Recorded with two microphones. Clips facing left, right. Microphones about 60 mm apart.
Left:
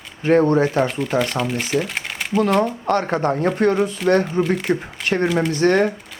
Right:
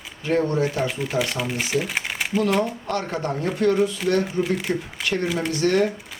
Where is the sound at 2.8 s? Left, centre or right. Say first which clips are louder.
Left 7 dB; left.